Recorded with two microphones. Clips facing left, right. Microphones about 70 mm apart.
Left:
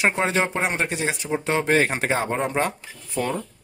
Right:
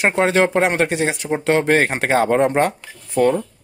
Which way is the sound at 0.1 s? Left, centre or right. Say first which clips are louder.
Right 7 dB; right.